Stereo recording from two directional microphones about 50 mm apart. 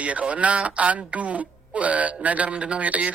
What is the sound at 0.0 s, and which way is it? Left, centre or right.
A man's voice, right.